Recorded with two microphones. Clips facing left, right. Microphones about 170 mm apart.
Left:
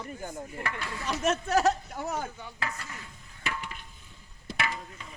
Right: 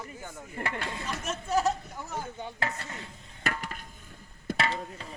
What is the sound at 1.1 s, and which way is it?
Speech, 75° left (ahead or behind).